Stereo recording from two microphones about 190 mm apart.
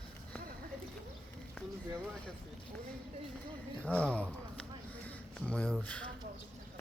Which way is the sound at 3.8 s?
5° left (ahead or behind).